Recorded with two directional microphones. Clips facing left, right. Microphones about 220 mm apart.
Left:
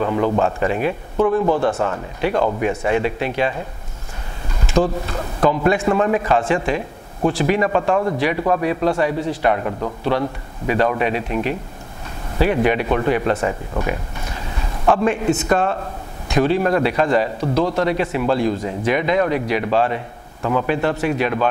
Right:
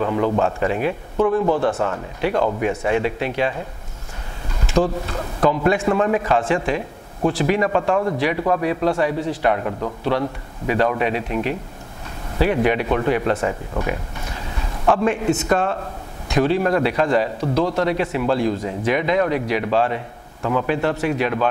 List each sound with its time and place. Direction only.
0.0 s speech: 25° left (ahead or behind)
4.7 s speech: 20° left (ahead or behind)
15.0 s speech: 20° left (ahead or behind)